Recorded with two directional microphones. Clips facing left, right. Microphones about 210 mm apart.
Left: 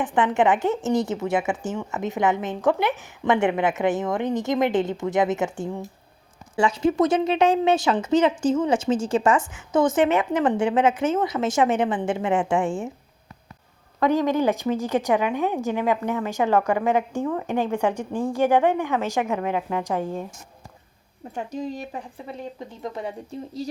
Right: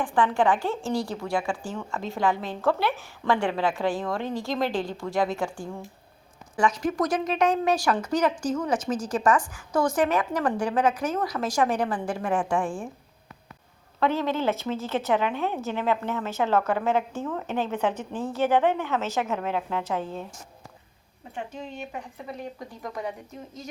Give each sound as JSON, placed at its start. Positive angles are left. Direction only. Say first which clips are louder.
{"t": 0.0, "sound": "a woman's voice", "louder": "left 2 dB", "side_deg": 20}
{"t": 14.0, "sound": "a woman's voice", "louder": "left 4 dB", "side_deg": 15}
{"t": 21.3, "sound": "speech", "louder": "left 6 dB", "side_deg": 40}
{"t": 22.8, "sound": "a woman's voice", "louder": "left 2 dB", "side_deg": 25}